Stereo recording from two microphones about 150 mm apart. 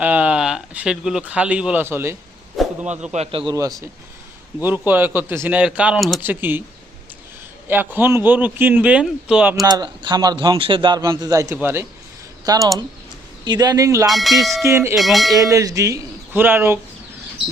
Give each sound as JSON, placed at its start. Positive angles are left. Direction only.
{"t": 0.0, "sound": "speech", "side_deg": -10}
{"t": 2.6, "sound": "a sound", "side_deg": -5}
{"t": 3.1, "sound": "a man's voice", "side_deg": -45}
{"t": 3.4, "sound": "a man's voice", "side_deg": -25}
{"t": 4.9, "sound": "speech", "side_deg": -15}
{"t": 7.7, "sound": "speech", "side_deg": -15}
{"t": 9.6, "sound": "a man's voice", "side_deg": -25}
{"t": 14.1, "sound": "bell", "side_deg": 0}
{"t": 14.6, "sound": "speech", "side_deg": -15}
{"t": 14.9, "sound": "bell", "side_deg": 0}
{"t": 15.4, "sound": "a man's voice", "side_deg": -20}